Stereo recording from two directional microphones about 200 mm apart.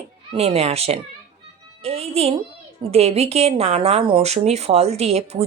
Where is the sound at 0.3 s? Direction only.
30° right (ahead or behind).